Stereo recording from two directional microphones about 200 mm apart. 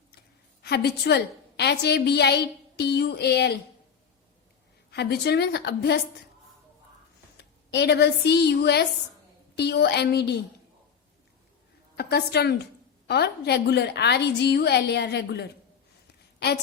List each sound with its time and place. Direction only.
0.6 s a woman's voice: 55° left (ahead or behind)
4.9 s a woman's voice: 55° left (ahead or behind)
7.3 s a woman's voice: 55° left (ahead or behind)
11.9 s a woman's voice: 55° left (ahead or behind)